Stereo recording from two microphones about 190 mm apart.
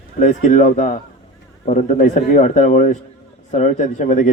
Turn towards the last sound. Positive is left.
turn(degrees=40)  # may be behind; listen again after turning